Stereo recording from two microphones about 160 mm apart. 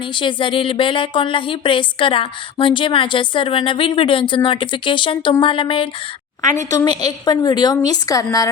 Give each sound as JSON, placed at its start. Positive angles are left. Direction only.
{"t": 0.1, "sound": "speech", "side_deg": 30}
{"t": 6.6, "sound": "a woman's voice", "side_deg": 20}